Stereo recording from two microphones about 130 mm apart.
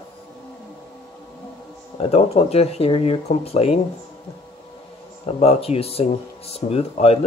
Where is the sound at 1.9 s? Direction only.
50° left (ahead or behind).